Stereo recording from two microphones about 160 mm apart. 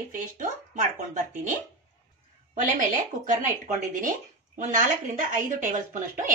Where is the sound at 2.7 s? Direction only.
55° right (ahead or behind).